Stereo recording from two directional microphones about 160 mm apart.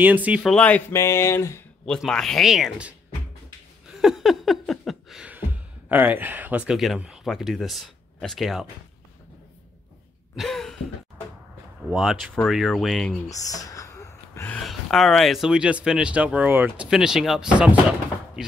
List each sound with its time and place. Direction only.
0.0 s speech: 10° right (ahead or behind)
0.4 s speech: 5° left (ahead or behind)
1.9 s speech: 5° left (ahead or behind)
3.9 s a sound: centre (ahead or behind)
10.3 s throat clearing: centre (ahead or behind)
11.9 s speech: 5° right (ahead or behind)
13.3 s a sound: 20° left (ahead or behind)
14.6 s speech: centre (ahead or behind)